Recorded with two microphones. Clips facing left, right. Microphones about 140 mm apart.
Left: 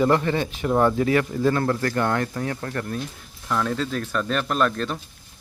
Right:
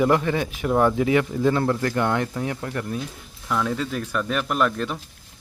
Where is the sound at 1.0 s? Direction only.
15° right (ahead or behind).